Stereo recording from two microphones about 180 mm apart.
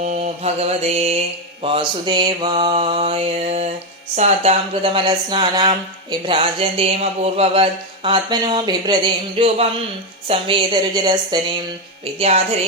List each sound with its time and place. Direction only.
0.0 s mantra: 40° right (ahead or behind)
1.6 s speech: 30° right (ahead or behind)
12.2 s mantra: 35° right (ahead or behind)